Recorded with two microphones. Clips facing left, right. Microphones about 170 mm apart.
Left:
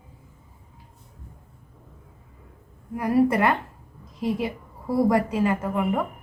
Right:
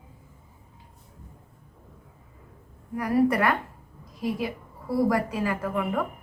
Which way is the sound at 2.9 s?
25° left (ahead or behind).